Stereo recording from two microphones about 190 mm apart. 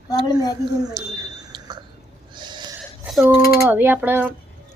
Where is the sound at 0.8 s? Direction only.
20° right (ahead or behind).